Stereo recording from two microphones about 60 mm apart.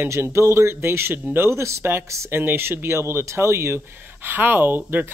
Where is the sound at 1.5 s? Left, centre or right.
Right.